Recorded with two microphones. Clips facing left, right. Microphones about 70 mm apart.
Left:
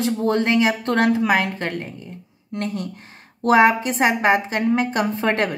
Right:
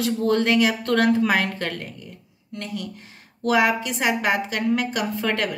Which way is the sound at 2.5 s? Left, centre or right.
Left.